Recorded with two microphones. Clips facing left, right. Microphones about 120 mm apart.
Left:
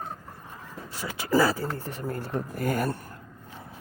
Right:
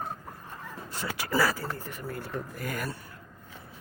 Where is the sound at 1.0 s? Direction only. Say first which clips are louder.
Left 4 dB; 20° left (ahead or behind); by 3.0 s 45° left (ahead or behind).